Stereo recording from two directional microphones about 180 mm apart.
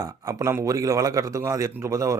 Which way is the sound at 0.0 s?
20° right (ahead or behind).